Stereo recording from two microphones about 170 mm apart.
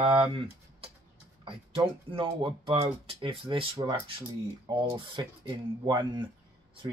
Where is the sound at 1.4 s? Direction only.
30° right (ahead or behind).